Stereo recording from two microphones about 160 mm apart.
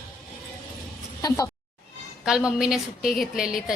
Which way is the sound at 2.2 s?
5° right (ahead or behind).